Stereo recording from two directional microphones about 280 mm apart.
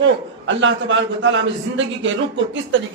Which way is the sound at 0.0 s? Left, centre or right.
Right.